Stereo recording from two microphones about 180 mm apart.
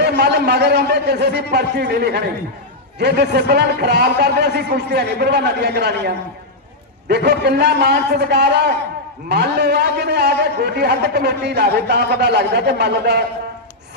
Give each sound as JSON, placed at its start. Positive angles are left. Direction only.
{"t": 0.0, "sound": "a man's voice", "side_deg": -70}